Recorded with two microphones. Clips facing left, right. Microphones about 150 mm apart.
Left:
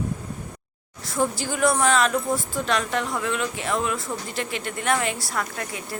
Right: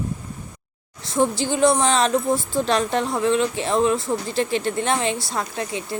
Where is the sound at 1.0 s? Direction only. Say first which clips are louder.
Right 4 dB; 25° right (ahead or behind).